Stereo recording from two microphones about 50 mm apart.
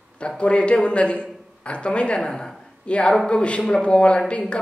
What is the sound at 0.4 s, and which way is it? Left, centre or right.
A man's voice, left.